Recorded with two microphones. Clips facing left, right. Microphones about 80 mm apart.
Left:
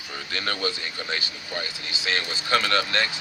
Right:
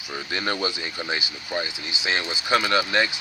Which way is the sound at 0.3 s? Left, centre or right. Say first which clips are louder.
Right 2 dB; centre.